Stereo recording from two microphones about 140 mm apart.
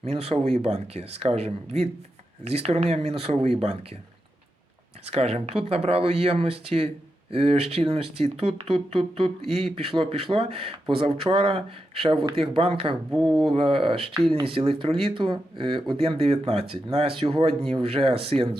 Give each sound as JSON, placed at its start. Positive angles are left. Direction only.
{"t": 0.0, "sound": "speech", "side_deg": -50}
{"t": 5.0, "sound": "speech", "side_deg": -45}
{"t": 13.1, "sound": "speech", "side_deg": 0}
{"t": 13.5, "sound": "speech", "side_deg": -40}